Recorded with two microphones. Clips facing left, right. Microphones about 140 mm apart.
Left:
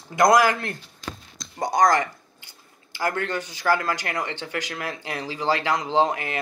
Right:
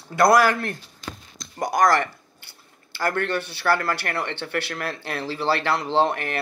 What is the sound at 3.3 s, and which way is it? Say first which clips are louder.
Speech: right 1 dB; 15° left (ahead or behind).